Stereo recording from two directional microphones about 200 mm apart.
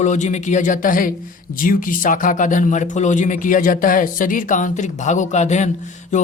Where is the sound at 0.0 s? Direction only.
35° left (ahead or behind).